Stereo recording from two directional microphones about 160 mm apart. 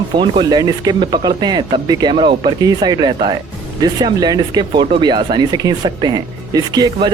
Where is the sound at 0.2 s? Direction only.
25° right (ahead or behind).